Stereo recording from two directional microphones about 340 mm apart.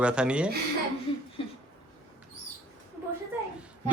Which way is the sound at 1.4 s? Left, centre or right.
Centre.